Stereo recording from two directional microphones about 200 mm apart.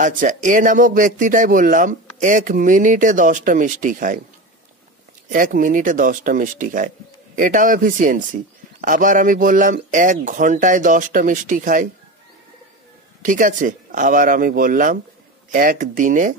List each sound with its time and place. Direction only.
0.0 s speech: 40° right (ahead or behind)
5.3 s speech: 40° right (ahead or behind)
13.2 s speech: 40° right (ahead or behind)